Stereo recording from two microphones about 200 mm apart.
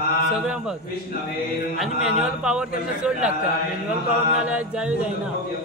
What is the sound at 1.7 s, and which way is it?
Speech, centre (ahead or behind).